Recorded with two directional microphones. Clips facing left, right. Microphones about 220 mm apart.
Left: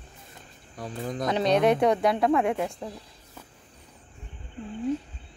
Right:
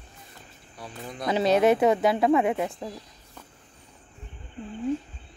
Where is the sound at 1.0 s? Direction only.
40° left (ahead or behind).